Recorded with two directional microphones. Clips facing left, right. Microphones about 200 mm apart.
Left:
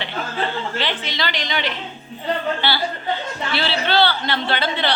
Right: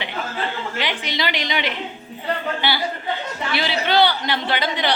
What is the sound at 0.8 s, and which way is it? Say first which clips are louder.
A man's voice: even; 15° right (ahead or behind).